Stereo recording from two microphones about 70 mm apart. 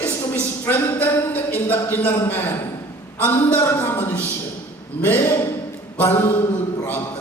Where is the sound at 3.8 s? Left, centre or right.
Left.